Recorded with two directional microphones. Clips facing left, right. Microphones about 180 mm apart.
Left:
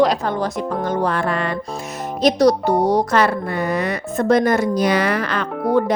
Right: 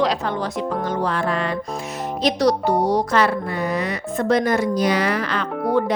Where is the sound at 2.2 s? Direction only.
45° left (ahead or behind).